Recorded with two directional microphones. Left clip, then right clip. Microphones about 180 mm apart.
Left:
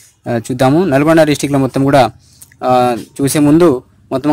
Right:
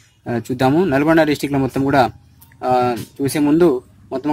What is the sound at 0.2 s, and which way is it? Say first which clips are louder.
Speech: left 5 dB; 20° left (ahead or behind).